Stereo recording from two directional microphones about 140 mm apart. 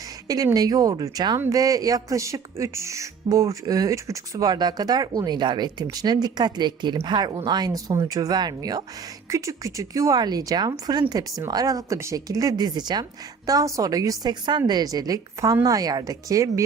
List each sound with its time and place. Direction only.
0.3 s speech: 25° right (ahead or behind)